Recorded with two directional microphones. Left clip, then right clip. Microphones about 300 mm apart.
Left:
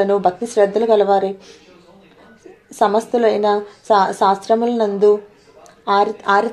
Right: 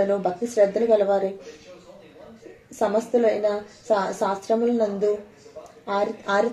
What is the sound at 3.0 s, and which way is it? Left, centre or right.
A woman's voice, centre.